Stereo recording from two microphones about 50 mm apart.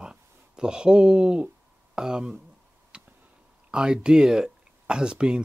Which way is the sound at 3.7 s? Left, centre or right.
Centre.